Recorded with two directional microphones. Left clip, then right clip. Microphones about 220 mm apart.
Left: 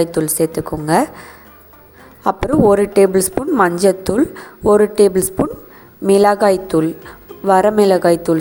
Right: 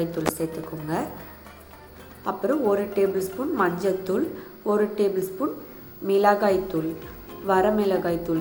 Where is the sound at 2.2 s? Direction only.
50° left (ahead or behind).